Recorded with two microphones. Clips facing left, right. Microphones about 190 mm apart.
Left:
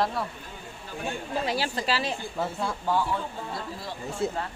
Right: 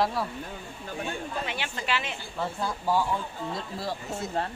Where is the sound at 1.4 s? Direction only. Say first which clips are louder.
Left 5 dB; 35° left (ahead or behind).